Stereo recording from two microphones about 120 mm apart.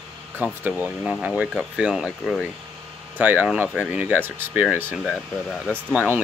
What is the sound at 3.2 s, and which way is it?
Speech, 15° right (ahead or behind).